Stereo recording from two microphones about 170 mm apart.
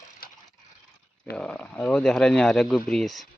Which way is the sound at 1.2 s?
5° left (ahead or behind).